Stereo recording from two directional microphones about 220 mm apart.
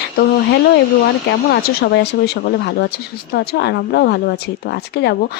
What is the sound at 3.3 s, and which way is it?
Speech, 50° left (ahead or behind).